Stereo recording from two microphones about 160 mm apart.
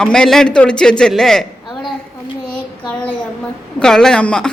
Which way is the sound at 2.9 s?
10° left (ahead or behind).